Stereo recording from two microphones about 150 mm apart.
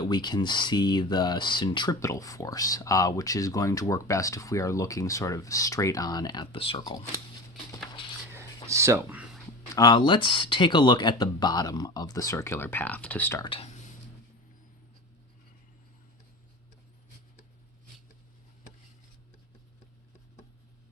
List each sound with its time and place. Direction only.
0.0 s speech: 30° left (ahead or behind)
8.6 s speech: 20° right (ahead or behind)
9.7 s speech: 30° left (ahead or behind); by 13.4 s 10° left (ahead or behind)
13.4 s speech: 35° left (ahead or behind)